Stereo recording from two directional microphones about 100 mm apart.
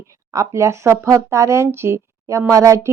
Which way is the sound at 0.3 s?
30° right (ahead or behind).